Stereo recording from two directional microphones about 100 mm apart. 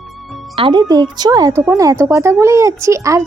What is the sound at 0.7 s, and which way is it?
Speech, 40° right (ahead or behind).